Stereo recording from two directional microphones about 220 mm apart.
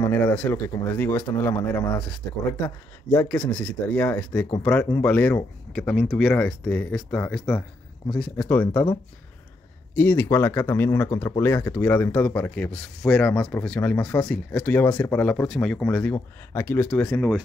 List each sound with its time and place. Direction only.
0.0 s speech: 5° left (ahead or behind)
9.9 s speech: 10° left (ahead or behind)